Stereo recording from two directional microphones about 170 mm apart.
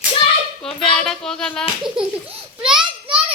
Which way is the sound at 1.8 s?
5° right (ahead or behind).